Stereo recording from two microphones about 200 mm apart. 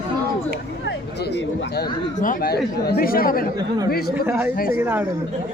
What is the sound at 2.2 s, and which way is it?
Speech, 40° left (ahead or behind).